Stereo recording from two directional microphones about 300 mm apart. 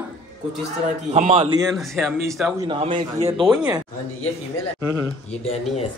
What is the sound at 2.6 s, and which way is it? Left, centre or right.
Speech, centre.